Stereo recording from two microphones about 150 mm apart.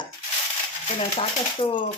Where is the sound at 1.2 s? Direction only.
35° left (ahead or behind).